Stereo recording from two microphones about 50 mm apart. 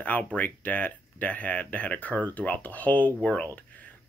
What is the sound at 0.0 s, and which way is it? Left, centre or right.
Speech, left.